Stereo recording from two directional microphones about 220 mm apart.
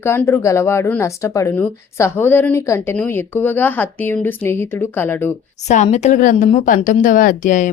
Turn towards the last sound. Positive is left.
turn(degrees=35)  # may be behind; listen again after turning